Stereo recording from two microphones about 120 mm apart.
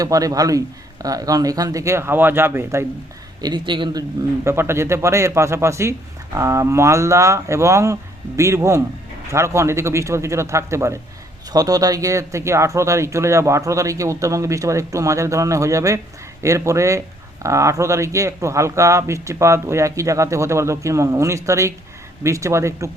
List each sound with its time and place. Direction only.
0.0 s speech: 30° right (ahead or behind)
3.4 s speech: 40° right (ahead or behind)
4.4 s speech: 20° right (ahead or behind)